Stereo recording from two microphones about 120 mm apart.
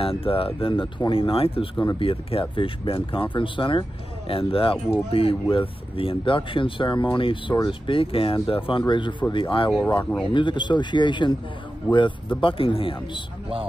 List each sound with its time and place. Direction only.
0.0 s speech: 50° left (ahead or behind)